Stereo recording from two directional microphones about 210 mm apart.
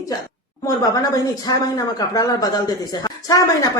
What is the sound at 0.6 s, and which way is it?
Speech, 15° left (ahead or behind).